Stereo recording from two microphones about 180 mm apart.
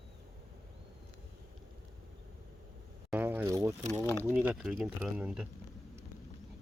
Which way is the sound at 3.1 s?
10° right (ahead or behind).